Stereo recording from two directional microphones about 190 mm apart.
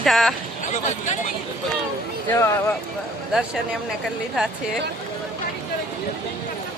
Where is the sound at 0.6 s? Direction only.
40° left (ahead or behind).